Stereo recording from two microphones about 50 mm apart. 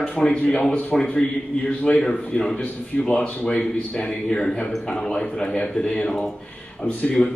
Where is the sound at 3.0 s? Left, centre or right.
Left.